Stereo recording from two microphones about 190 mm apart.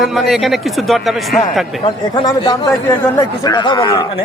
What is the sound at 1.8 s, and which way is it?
A man's voice, 20° left (ahead or behind).